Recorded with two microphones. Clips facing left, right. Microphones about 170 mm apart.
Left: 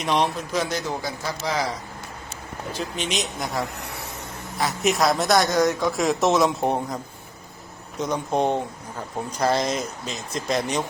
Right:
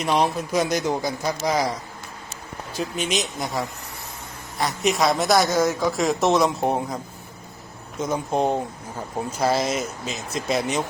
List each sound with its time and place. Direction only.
0.0 s a woman's voice: centre (ahead or behind)
0.5 s a man's voice: 15° right (ahead or behind)
2.7 s a woman's voice: 5° right (ahead or behind)
3.8 s a sound: 70° left (ahead or behind)
4.5 s a woman's voice: centre (ahead or behind)